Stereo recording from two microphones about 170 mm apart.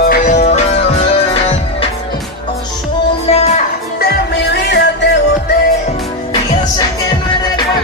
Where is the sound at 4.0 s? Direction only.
80° left.